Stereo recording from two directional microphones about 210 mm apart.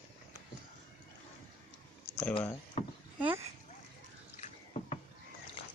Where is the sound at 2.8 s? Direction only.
30° left (ahead or behind).